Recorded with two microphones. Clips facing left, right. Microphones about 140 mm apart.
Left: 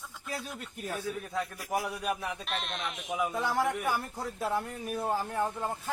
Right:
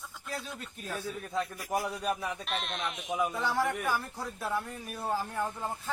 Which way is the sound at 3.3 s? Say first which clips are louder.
Left 1 dB; 15° left (ahead or behind).